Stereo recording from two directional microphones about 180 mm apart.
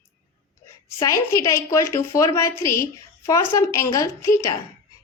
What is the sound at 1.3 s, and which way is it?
A woman's voice, 15° left (ahead or behind).